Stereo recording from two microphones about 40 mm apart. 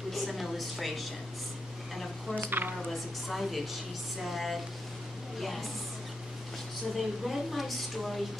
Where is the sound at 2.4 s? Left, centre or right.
Right.